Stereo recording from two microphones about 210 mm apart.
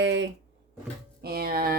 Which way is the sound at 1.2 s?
45° right (ahead or behind).